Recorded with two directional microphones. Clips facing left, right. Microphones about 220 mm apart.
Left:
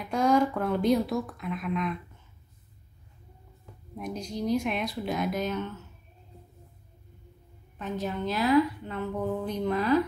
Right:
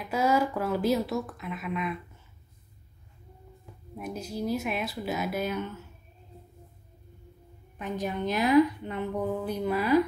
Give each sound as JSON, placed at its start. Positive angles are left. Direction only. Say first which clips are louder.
{"t": 0.0, "sound": "speech", "louder": "left 2 dB", "side_deg": -5}
{"t": 3.9, "sound": "speech", "louder": "left 1 dB", "side_deg": -5}
{"t": 7.8, "sound": "speech", "louder": "even", "side_deg": -15}